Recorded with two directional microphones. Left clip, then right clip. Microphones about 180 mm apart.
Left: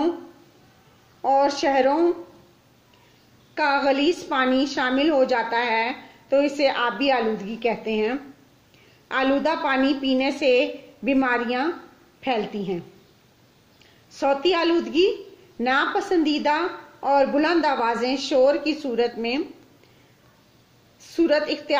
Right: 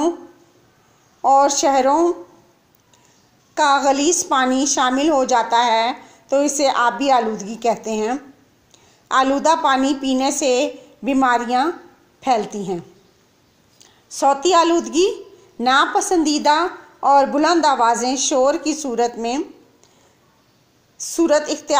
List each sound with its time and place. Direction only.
1.2 s a woman's voice: 25° right (ahead or behind)
3.5 s a woman's voice: 25° right (ahead or behind)
14.1 s a woman's voice: 25° right (ahead or behind)
21.0 s a woman's voice: 25° right (ahead or behind)